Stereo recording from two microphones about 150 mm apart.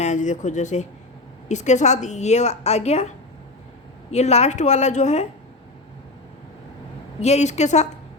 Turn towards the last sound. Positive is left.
turn(degrees=50)  # may be behind; listen again after turning